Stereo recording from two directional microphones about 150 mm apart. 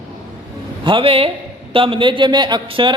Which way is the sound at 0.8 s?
35° right (ahead or behind).